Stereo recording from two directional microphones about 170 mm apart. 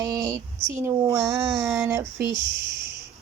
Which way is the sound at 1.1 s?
15° right (ahead or behind).